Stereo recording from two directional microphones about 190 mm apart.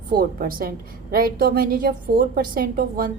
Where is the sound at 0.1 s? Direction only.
50° right (ahead or behind).